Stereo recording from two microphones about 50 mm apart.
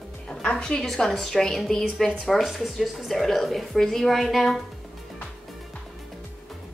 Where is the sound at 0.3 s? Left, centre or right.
Centre.